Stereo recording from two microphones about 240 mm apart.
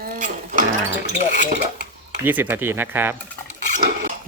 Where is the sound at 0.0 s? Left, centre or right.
Right.